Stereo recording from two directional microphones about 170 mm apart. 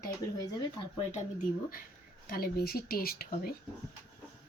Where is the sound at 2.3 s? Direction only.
60° left (ahead or behind).